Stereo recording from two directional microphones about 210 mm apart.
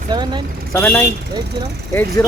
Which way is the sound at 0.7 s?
10° left (ahead or behind).